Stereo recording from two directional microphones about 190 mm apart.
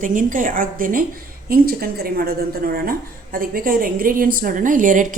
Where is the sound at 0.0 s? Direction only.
45° right (ahead or behind).